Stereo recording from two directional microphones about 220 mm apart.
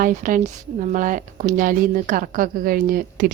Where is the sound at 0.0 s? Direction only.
35° right (ahead or behind).